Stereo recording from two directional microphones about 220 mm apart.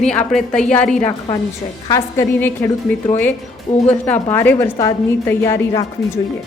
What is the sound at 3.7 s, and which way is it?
Speech, 30° left (ahead or behind).